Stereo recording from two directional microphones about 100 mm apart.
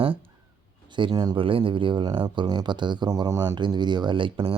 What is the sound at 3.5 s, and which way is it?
Speech, 50° right (ahead or behind).